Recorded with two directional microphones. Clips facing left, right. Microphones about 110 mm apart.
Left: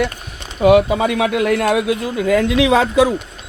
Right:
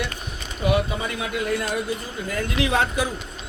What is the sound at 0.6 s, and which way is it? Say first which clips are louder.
Speech: left 11 dB; 90° left.